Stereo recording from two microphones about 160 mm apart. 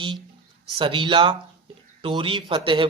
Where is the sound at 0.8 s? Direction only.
30° right (ahead or behind).